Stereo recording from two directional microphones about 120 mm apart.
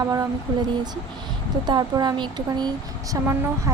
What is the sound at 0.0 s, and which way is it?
Speech, 25° right (ahead or behind).